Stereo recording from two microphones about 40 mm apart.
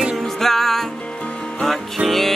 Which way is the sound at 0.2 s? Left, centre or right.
Centre.